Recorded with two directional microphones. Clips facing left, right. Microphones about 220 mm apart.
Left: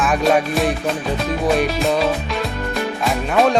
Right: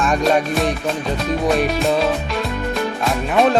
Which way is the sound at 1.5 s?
Centre (ahead or behind).